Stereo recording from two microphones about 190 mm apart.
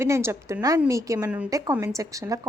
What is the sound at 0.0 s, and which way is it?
A woman's voice, 15° right (ahead or behind).